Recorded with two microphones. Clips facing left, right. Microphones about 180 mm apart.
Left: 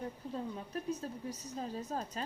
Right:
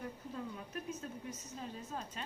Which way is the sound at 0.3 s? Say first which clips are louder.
Left 5 dB; 35° left (ahead or behind).